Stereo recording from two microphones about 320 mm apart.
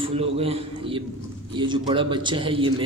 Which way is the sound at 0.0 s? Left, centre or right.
Centre.